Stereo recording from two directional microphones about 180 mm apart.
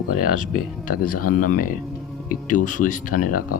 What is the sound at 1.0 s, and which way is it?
Speech, 50° left (ahead or behind).